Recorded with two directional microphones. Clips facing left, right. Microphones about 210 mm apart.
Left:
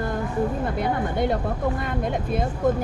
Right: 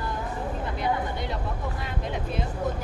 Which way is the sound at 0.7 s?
50° left (ahead or behind).